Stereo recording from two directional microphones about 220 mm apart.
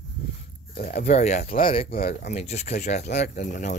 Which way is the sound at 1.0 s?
30° left (ahead or behind).